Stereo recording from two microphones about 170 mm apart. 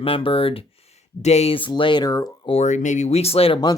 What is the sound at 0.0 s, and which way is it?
Speech, 35° left (ahead or behind).